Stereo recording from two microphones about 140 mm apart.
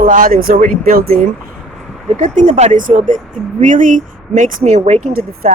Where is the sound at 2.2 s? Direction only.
65° right (ahead or behind).